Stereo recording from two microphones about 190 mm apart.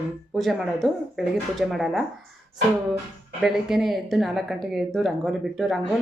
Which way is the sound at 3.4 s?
Centre (ahead or behind).